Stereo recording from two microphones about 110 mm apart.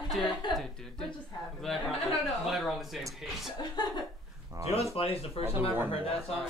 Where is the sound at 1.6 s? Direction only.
Centre (ahead or behind).